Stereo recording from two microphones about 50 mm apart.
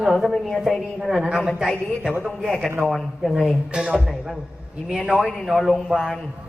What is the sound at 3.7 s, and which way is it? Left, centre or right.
Speech, centre.